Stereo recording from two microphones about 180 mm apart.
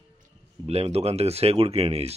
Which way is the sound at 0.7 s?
35° right (ahead or behind).